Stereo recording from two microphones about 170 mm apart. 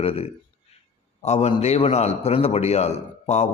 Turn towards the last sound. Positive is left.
turn(degrees=40)  # may be behind; listen again after turning